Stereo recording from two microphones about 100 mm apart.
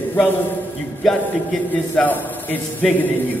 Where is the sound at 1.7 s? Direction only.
15° left (ahead or behind).